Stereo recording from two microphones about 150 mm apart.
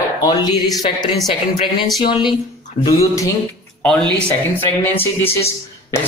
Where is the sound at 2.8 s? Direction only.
20° left (ahead or behind).